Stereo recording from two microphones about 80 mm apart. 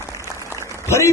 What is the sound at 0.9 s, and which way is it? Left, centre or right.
Speech, left.